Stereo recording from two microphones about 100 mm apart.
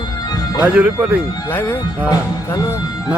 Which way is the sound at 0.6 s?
15° right (ahead or behind).